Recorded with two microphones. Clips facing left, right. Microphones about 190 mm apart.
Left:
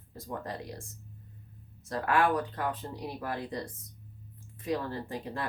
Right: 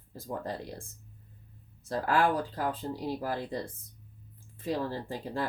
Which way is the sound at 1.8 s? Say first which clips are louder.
Even; 30° right (ahead or behind).